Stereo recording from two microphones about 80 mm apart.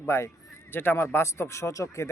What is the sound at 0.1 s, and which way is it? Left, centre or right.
A man's voice, left.